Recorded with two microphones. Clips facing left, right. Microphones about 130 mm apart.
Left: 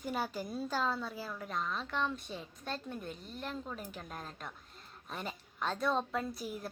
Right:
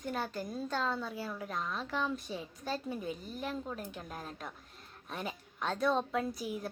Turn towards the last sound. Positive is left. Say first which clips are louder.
# right 3 dB
turn(degrees=0)  # may be behind; listen again after turning